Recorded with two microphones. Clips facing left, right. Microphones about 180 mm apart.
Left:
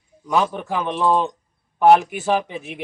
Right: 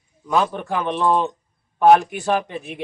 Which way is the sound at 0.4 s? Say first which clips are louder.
Even; 5° left (ahead or behind).